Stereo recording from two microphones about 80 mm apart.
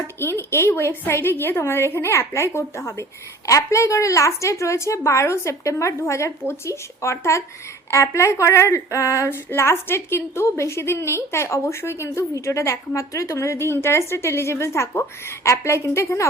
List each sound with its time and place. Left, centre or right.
0.2 s a woman's voice: left